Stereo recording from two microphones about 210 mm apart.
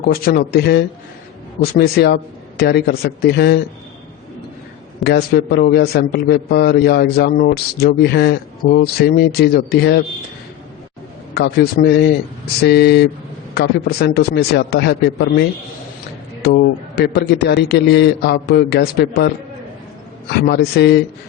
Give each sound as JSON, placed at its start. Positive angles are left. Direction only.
{"t": 0.0, "sound": "a man's voice", "side_deg": 45}
{"t": 5.0, "sound": "a man's voice", "side_deg": 50}
{"t": 11.3, "sound": "a man's voice", "side_deg": 45}
{"t": 20.5, "sound": "a man's voice", "side_deg": 50}